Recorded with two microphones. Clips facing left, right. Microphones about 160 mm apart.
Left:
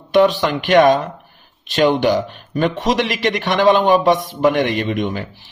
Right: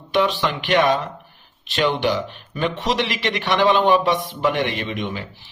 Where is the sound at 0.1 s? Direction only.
40° left (ahead or behind).